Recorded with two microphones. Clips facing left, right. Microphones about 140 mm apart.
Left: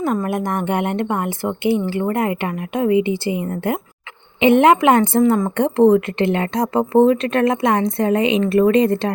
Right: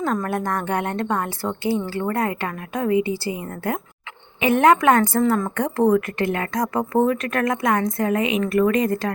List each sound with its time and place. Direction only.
0.0 s speech: 10° left (ahead or behind); by 9.1 s 30° left (ahead or behind)